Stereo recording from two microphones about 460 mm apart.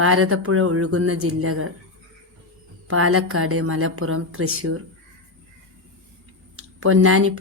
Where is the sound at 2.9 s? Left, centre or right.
Right.